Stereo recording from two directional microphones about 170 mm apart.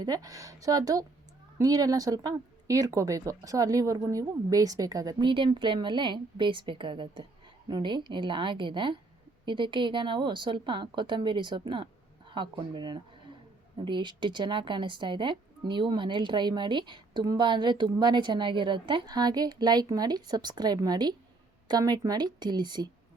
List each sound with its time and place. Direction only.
0.0 s speech: 20° right (ahead or behind)